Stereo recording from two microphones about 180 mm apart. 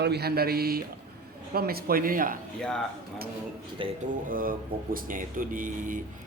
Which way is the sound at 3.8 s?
30° right (ahead or behind).